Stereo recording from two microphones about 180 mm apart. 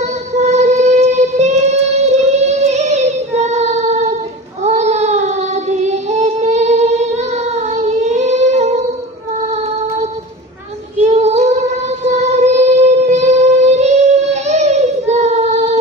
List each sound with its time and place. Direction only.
0.3 s music: 40° right (ahead or behind)
4.6 s baby cry: 40° right (ahead or behind)
5.9 s music: 40° right (ahead or behind)
7.7 s child singing: 40° right (ahead or behind)
11.0 s child singing: 40° right (ahead or behind)
12.0 s a sound: 40° right (ahead or behind)